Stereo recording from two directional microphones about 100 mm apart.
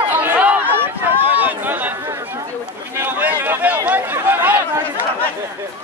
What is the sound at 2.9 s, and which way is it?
Chatter, 20° right (ahead or behind).